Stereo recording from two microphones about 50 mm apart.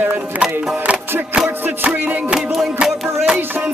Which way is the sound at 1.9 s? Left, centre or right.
Right.